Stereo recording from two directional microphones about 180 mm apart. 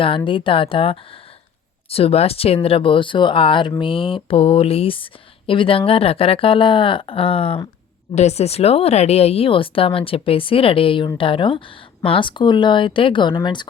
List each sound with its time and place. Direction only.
0.3 s speech: 30° left (ahead or behind)